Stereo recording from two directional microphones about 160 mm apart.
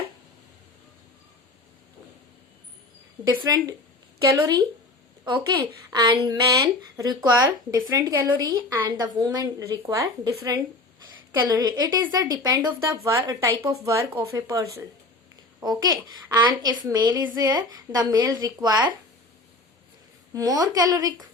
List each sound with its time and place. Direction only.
3.4 s speech: 25° right (ahead or behind)
20.3 s speech: 25° right (ahead or behind)